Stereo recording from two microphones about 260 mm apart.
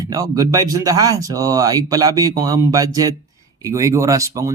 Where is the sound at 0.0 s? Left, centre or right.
Centre.